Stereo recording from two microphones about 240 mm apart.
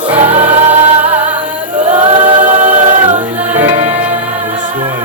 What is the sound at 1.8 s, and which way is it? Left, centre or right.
A capella, right.